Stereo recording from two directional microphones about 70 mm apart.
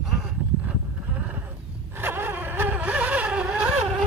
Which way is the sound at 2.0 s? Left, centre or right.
Right.